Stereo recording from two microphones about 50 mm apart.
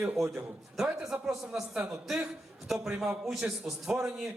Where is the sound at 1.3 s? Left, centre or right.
Centre.